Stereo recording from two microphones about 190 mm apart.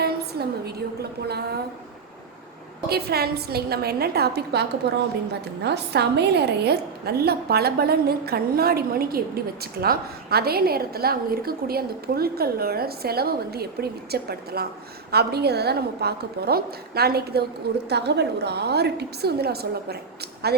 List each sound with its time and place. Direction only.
0.0 s a sound: 55° right (ahead or behind)
1.3 s a woman's voice: 60° right (ahead or behind)
2.9 s a woman's voice: 55° right (ahead or behind)